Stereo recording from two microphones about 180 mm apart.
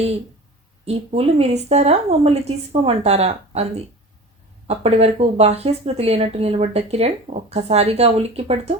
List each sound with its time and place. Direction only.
0.9 s speech: 35° right (ahead or behind)
4.7 s speech: 35° right (ahead or behind)